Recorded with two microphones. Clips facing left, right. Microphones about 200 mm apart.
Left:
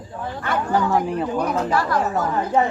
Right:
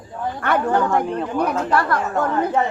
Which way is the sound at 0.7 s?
5° left (ahead or behind).